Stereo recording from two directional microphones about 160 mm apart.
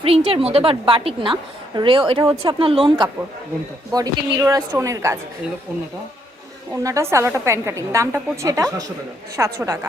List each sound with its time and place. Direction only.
0.0 s a woman's voice: 35° right (ahead or behind)
3.9 s a woman's voice: 25° right (ahead or behind)
6.8 s a woman's voice: 20° right (ahead or behind)